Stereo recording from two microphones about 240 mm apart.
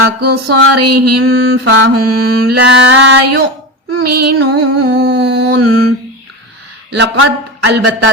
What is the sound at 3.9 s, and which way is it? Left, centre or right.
Female singing, right.